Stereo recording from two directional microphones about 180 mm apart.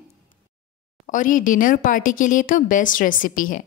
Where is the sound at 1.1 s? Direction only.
45° left (ahead or behind).